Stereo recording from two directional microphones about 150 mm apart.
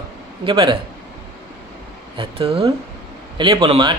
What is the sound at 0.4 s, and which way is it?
Speech, 30° right (ahead or behind).